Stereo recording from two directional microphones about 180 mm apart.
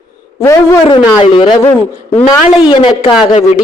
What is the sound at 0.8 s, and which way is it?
Speech, 30° left (ahead or behind).